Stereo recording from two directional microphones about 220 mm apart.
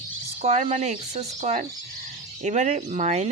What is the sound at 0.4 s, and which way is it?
Speech, 35° right (ahead or behind).